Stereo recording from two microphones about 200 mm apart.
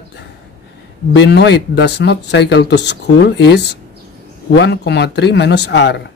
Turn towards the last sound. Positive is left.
turn(degrees=60)  # may be behind; listen again after turning